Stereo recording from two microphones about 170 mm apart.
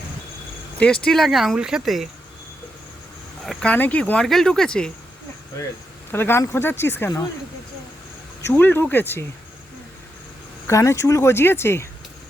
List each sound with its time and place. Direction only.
0.8 s speech: 5° left (ahead or behind)
3.4 s speech: 5° left (ahead or behind)
6.1 s speech: 15° left (ahead or behind)
8.4 s speech: 10° left (ahead or behind)
10.7 s speech: 15° left (ahead or behind)